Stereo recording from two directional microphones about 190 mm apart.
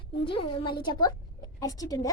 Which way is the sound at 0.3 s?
25° left (ahead or behind).